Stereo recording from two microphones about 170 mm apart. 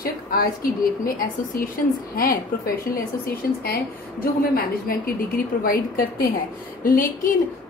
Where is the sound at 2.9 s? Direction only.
60° left (ahead or behind).